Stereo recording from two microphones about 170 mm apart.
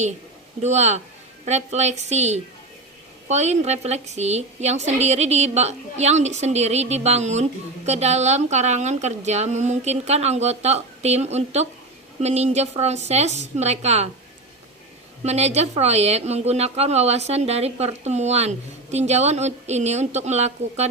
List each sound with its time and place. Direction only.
0.6 s a woman's voice: 40° right (ahead or behind)
15.2 s a woman's voice: 40° right (ahead or behind)